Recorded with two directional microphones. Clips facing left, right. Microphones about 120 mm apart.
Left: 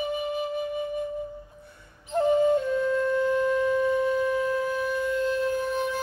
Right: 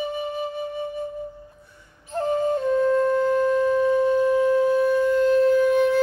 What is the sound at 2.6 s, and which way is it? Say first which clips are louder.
Wind instrument: right 5 dB; 40° right (ahead or behind).